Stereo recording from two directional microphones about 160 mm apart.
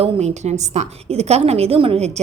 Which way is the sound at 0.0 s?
45° right (ahead or behind).